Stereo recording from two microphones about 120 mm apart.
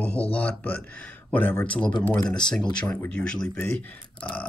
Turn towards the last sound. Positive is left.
turn(degrees=10)  # may be behind; listen again after turning